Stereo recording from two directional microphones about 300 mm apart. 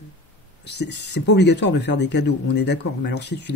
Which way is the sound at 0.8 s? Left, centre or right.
Left.